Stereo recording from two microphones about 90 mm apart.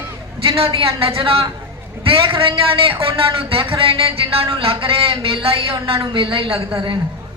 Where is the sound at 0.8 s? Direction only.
90° right.